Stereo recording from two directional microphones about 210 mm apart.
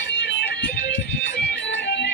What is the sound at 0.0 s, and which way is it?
Music, 55° left (ahead or behind).